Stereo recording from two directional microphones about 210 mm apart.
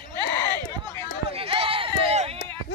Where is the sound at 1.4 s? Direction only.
25° right (ahead or behind).